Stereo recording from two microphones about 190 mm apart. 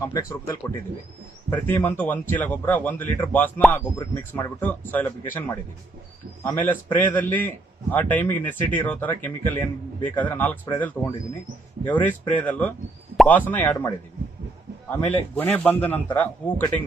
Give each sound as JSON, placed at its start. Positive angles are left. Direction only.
{"t": 0.0, "sound": "a man's voice", "side_deg": 15}